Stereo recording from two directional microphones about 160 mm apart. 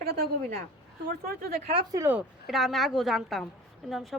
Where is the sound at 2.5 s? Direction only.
Centre (ahead or behind).